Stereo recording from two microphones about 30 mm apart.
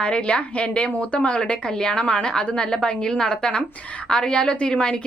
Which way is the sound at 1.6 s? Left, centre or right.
Left.